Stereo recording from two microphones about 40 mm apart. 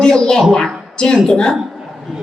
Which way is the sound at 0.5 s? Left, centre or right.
Centre.